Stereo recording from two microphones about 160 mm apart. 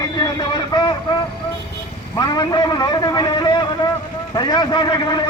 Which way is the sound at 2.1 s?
25° left (ahead or behind).